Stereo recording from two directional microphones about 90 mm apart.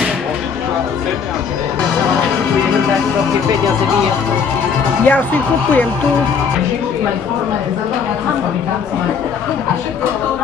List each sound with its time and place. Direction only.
5.0 s speech: 20° left (ahead or behind)